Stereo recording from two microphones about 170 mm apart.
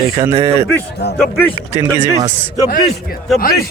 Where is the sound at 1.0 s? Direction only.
75° left (ahead or behind).